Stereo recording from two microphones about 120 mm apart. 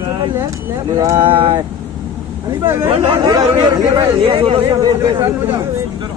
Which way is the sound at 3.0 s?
35° right (ahead or behind).